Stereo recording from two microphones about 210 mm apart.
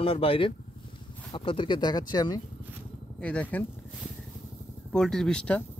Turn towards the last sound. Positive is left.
turn(degrees=5)  # may be behind; listen again after turning